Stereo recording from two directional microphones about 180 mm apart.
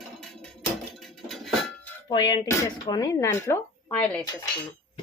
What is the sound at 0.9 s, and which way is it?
Music, centre (ahead or behind).